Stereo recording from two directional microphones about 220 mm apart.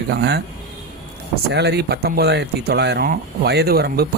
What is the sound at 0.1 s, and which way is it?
Speech, 45° right (ahead or behind).